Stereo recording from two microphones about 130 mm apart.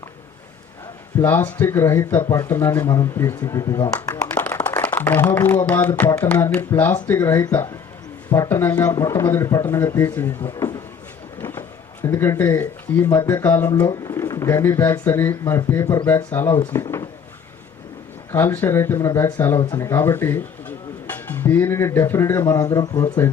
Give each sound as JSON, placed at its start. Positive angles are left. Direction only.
{"t": 1.2, "sound": "a man's voice", "side_deg": 15}
{"t": 12.0, "sound": "a man's voice", "side_deg": 20}
{"t": 13.8, "sound": "speech", "side_deg": 30}
{"t": 18.3, "sound": "a man's voice", "side_deg": 20}